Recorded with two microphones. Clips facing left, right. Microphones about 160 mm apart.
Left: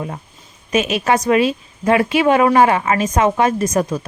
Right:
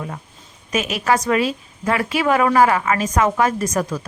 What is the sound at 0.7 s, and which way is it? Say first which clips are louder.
Speech: left 3 dB; 25° left (ahead or behind).